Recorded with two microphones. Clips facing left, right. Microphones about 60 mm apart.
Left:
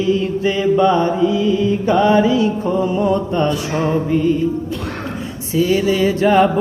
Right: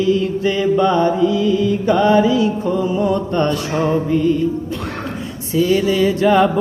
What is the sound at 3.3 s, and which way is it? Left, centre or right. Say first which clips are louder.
Music: even; centre.